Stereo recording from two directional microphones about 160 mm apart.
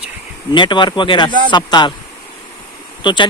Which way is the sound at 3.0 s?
30° left (ahead or behind).